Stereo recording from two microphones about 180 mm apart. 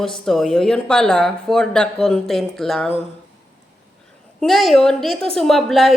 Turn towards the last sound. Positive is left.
turn(degrees=0)  # may be behind; listen again after turning